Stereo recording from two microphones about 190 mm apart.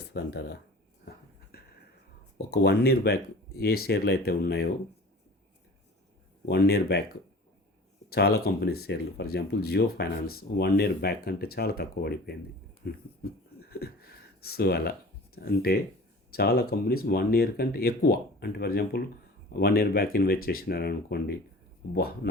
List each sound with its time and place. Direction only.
0.1 s speech: 65° left (ahead or behind)
1.5 s a sound: 50° left (ahead or behind)
2.5 s speech: 55° left (ahead or behind)
6.4 s speech: 55° left (ahead or behind)
8.1 s speech: 55° left (ahead or behind)
13.6 s a sound: 55° left (ahead or behind)
15.4 s speech: 55° left (ahead or behind)